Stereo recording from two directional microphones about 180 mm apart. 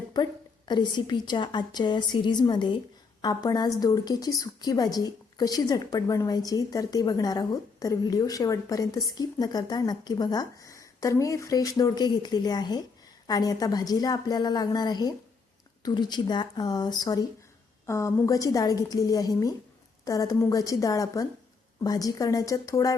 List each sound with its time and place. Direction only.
0.1 s a woman's voice: 25° left (ahead or behind)